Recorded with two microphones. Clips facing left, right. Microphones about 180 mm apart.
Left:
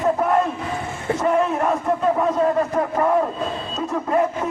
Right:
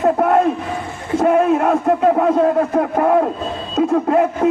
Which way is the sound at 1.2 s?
60° right (ahead or behind).